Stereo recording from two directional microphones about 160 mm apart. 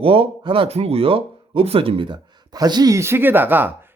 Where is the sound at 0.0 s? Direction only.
35° right (ahead or behind).